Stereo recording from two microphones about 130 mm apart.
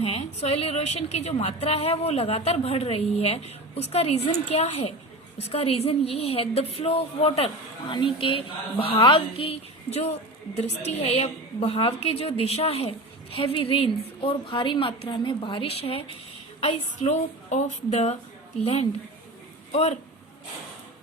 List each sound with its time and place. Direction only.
0.0 s a woman's voice: 50° left (ahead or behind)
16.6 s a woman's voice: 60° left (ahead or behind)